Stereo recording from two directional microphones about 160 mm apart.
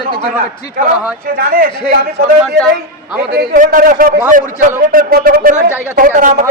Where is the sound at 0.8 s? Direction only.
65° right (ahead or behind).